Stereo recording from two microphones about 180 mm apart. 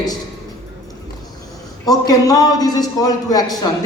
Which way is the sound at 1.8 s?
20° left (ahead or behind).